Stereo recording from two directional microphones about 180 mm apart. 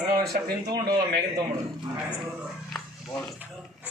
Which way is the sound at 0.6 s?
20° right (ahead or behind).